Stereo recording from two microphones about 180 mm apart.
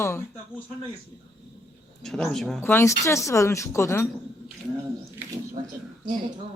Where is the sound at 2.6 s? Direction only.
15° left (ahead or behind).